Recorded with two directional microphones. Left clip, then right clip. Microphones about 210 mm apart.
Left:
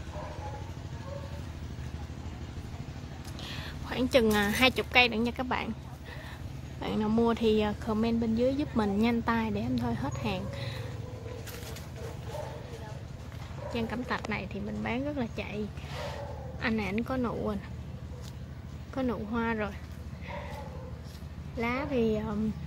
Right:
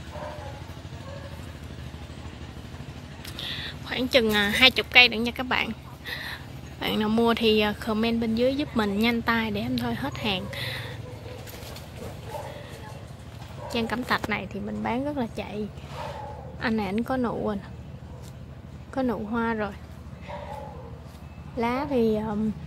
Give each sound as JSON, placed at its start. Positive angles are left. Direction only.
{"t": 3.3, "sound": "speech", "side_deg": 5}
{"t": 13.7, "sound": "a woman's voice", "side_deg": -10}
{"t": 18.9, "sound": "a woman's voice", "side_deg": -15}
{"t": 21.5, "sound": "a woman's voice", "side_deg": -15}